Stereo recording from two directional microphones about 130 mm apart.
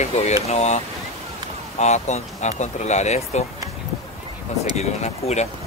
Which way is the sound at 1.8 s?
60° left (ahead or behind).